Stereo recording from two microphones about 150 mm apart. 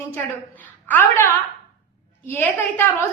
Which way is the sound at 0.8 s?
15° left (ahead or behind).